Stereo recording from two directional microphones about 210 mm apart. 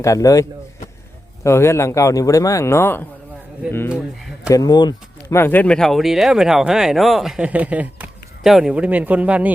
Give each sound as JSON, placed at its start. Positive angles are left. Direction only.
{"t": 0.0, "sound": "speech", "side_deg": 15}
{"t": 1.5, "sound": "speech", "side_deg": 15}
{"t": 4.4, "sound": "speech", "side_deg": 15}